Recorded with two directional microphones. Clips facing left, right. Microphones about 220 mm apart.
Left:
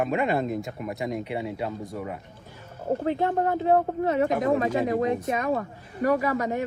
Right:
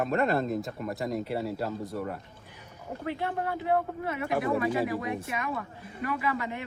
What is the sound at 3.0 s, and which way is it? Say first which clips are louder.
A woman's voice: left 5 dB; 45° left (ahead or behind).